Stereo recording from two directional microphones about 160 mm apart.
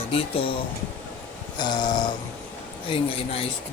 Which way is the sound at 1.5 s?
25° left (ahead or behind).